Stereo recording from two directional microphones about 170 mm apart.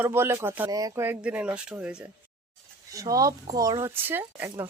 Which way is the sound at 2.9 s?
20° right (ahead or behind).